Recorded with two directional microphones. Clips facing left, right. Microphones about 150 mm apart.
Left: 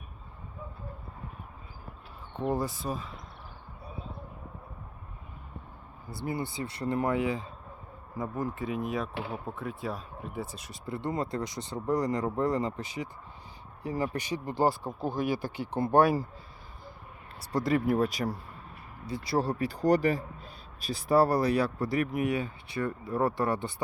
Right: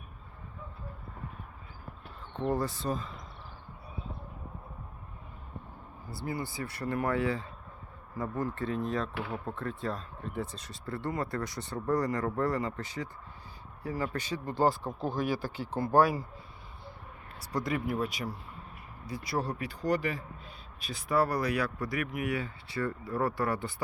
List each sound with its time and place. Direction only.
2.4 s speech: 10° left (ahead or behind)
6.1 s a man's voice: 20° left (ahead or behind)
17.4 s speech: 30° left (ahead or behind)
19.0 s a man's voice: 30° left (ahead or behind)